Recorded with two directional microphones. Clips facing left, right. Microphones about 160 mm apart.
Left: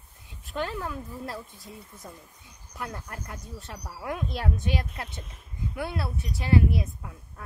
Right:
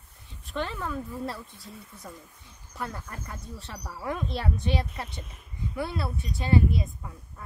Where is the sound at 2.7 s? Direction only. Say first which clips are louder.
Right 1 dB; centre (ahead or behind).